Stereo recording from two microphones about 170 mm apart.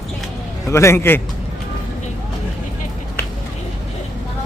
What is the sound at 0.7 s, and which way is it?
Speech, 15° left (ahead or behind).